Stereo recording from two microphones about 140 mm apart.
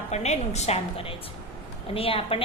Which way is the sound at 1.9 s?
40° left (ahead or behind).